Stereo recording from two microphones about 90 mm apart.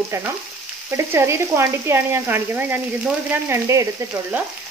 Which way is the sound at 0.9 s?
30° right (ahead or behind).